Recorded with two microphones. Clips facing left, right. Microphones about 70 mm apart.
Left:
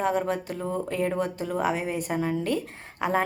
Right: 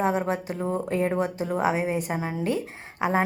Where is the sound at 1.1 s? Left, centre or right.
Centre.